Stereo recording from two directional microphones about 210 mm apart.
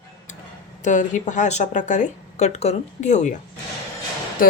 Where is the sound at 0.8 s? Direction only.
35° left (ahead or behind).